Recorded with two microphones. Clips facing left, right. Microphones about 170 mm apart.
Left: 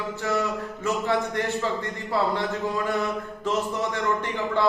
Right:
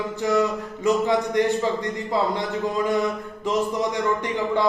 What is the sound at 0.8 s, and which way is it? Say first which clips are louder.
A man's voice: right 5 dB; 15° right (ahead or behind).